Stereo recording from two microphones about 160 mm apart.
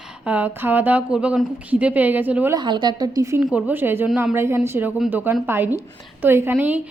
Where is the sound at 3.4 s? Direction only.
5° right (ahead or behind).